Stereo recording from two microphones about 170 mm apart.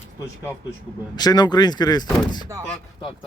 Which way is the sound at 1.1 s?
25° left (ahead or behind).